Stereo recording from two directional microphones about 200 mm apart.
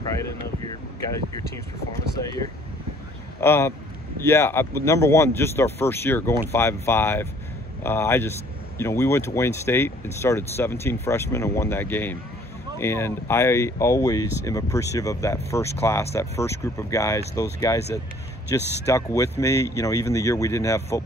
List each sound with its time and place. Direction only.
2.1 s speech: 15° left (ahead or behind)